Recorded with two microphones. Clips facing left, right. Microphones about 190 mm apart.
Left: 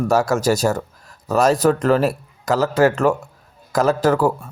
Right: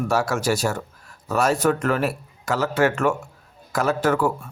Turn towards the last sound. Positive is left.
turn(degrees=35)  # may be behind; listen again after turning